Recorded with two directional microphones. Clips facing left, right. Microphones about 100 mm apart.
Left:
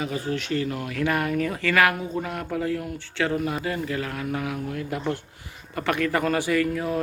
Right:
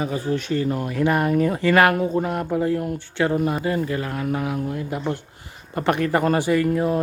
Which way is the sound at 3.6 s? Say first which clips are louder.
Right 4 dB; 30° right (ahead or behind).